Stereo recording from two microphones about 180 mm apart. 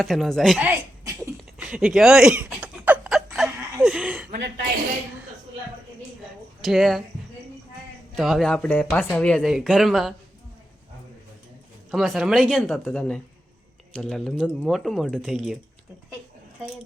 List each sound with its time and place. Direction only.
0.0 s speech: centre (ahead or behind)
0.7 s a sound: 10° right (ahead or behind)
4.3 s a woman's voice: 70° right (ahead or behind)
6.6 s speech: centre (ahead or behind)
8.1 s speech: centre (ahead or behind)
11.9 s speech: centre (ahead or behind)